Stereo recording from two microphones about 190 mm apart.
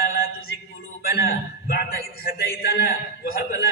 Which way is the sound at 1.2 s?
50° left (ahead or behind).